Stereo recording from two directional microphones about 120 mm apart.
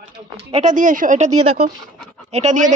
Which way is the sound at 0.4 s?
55° right (ahead or behind).